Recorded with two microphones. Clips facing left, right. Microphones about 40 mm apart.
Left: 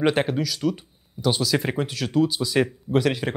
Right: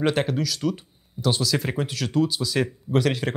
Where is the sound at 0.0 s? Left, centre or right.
Centre.